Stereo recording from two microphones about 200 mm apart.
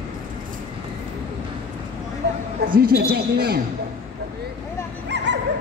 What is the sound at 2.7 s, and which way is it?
Speech, 50° right (ahead or behind).